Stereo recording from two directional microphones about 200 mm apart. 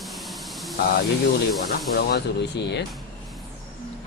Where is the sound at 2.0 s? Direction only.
55° left (ahead or behind).